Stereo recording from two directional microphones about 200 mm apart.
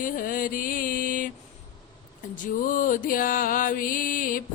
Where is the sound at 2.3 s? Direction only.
40° left (ahead or behind).